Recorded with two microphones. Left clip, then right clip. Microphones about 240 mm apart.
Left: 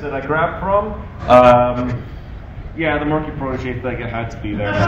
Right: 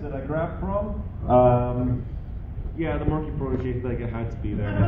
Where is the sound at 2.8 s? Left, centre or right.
Left.